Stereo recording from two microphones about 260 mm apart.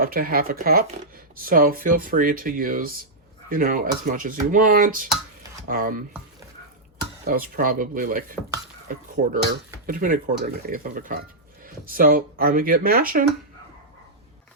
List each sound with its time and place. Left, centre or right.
0.0 s speech: right
7.3 s speech: right